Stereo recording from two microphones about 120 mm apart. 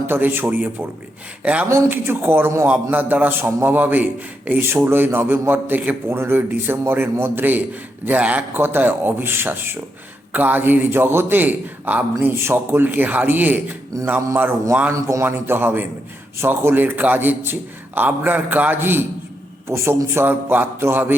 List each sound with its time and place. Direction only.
0.1 s a man's voice: 20° right (ahead or behind)
1.6 s a man's voice: 20° right (ahead or behind)